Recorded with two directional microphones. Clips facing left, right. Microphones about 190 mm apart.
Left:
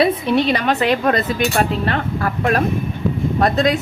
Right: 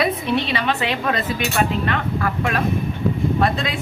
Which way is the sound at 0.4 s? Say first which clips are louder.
Left 5 dB; 45° left (ahead or behind).